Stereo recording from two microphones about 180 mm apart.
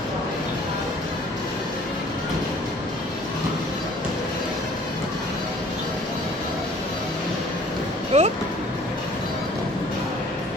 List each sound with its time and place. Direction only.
8.1 s speech: 40° right (ahead or behind)